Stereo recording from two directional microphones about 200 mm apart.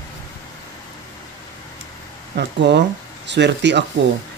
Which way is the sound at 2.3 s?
60° right (ahead or behind).